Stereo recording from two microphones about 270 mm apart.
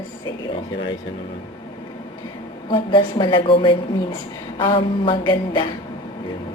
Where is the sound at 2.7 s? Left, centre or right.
Centre.